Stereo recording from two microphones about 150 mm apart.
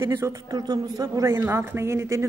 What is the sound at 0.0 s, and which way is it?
A woman's voice, 20° right (ahead or behind).